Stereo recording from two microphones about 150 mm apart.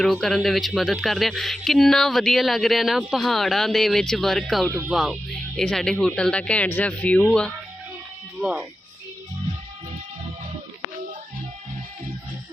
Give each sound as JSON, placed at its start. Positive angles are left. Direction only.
{"t": 0.0, "sound": "speech", "side_deg": 0}
{"t": 4.6, "sound": "speech", "side_deg": -20}
{"t": 4.9, "sound": "speech", "side_deg": 0}
{"t": 8.4, "sound": "speech", "side_deg": -5}